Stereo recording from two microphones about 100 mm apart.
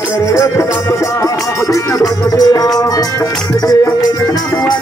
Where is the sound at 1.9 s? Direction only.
40° left (ahead or behind).